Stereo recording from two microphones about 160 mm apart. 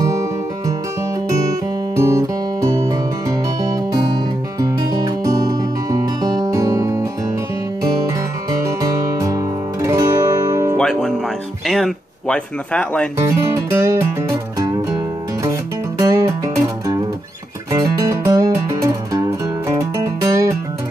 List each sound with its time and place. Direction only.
0.0 s music: 20° right (ahead or behind)
8.5 s music: 20° right (ahead or behind)
10.8 s music: 5° left (ahead or behind)
11.6 s speech: centre (ahead or behind)
13.2 s music: 15° right (ahead or behind)
16.0 s music: 20° right (ahead or behind)
17.7 s music: 20° right (ahead or behind)